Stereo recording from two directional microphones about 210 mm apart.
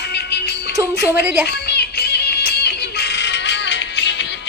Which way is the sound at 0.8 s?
15° right (ahead or behind).